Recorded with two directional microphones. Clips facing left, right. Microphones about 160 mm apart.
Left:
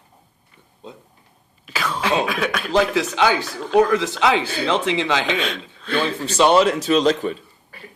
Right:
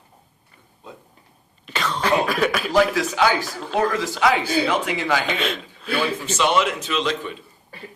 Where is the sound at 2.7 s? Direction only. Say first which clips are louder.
Left 2 dB; 20° left (ahead or behind).